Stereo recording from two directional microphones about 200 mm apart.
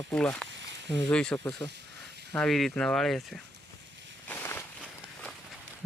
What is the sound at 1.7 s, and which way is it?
Snake, 60° right (ahead or behind).